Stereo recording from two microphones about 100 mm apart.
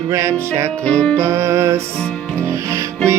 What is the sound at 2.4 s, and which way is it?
Music, 30° right (ahead or behind).